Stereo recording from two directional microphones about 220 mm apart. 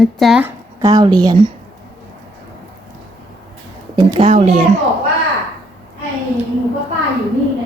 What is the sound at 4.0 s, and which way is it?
Speech, 20° right (ahead or behind).